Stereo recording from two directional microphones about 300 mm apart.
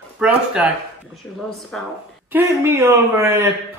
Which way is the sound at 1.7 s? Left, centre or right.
Centre.